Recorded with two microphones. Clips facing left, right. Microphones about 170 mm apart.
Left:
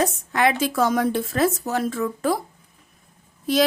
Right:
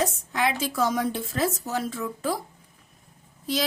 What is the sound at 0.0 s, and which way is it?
A woman's voice, 60° left (ahead or behind).